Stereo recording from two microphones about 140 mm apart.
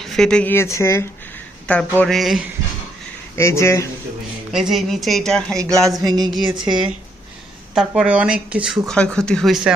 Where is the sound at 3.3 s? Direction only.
20° left (ahead or behind).